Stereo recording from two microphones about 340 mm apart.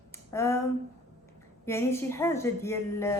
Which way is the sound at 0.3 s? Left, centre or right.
Centre.